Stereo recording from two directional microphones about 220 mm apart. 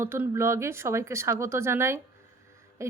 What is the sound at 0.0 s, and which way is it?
Speech, 10° right (ahead or behind).